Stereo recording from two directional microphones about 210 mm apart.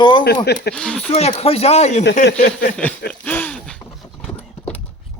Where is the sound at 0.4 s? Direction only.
50° left (ahead or behind).